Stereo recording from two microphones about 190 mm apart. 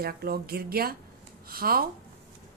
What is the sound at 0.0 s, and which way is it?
A woman's voice, 55° right (ahead or behind).